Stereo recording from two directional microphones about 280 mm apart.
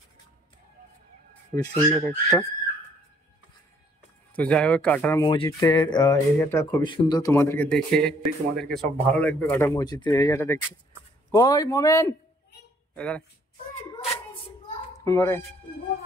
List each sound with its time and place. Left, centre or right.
1.9 s speech: centre
4.4 s speech: centre
13.8 s a sound: centre
15.0 s speech: centre